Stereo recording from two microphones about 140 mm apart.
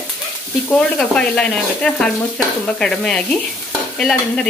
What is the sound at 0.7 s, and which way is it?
Frying, 5° left (ahead or behind).